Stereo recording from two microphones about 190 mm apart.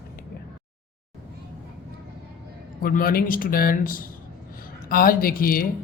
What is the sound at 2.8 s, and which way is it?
Speech, 50° left (ahead or behind).